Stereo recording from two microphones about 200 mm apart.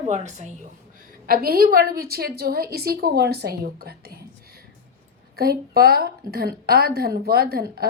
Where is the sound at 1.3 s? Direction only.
50° right (ahead or behind).